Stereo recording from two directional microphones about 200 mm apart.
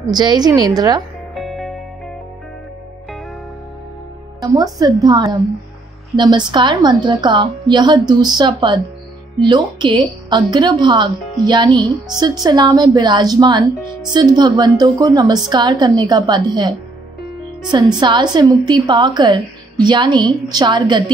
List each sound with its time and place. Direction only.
0.1 s a woman's voice: 20° right (ahead or behind)
1.3 s music: centre (ahead or behind)
4.4 s a woman's voice: 15° right (ahead or behind)
17.9 s a woman's voice: 20° right (ahead or behind)